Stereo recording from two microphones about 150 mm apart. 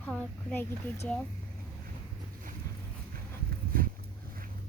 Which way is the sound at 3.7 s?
65° right (ahead or behind).